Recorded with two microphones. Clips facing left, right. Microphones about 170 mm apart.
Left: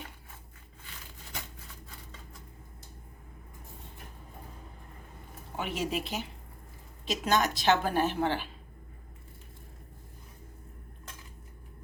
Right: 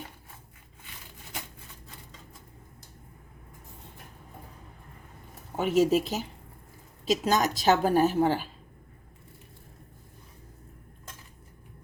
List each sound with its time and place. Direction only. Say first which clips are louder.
5.5 s a woman's voice: right 10 dB; 40° right (ahead or behind)